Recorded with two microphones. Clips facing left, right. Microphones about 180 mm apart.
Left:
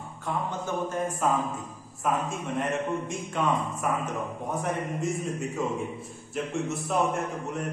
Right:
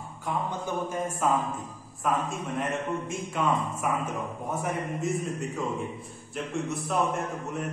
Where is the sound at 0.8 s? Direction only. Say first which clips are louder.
Left 1 dB; 10° right (ahead or behind).